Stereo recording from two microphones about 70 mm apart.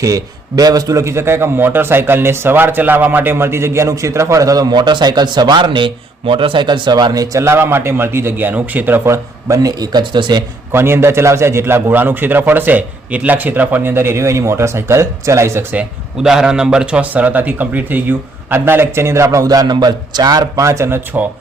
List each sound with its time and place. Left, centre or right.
0.0 s a man's voice: right
1.0 s a man's voice: right
7.4 s a man's voice: right
9.0 s a man's voice: right
9.6 s speech: right
10.7 s a man's voice: right
13.9 s a man's voice: right
16.2 s a man's voice: centre; by 20.7 s right
20.7 s a man's voice: right